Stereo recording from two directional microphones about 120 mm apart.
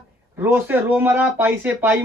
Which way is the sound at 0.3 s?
15° right (ahead or behind).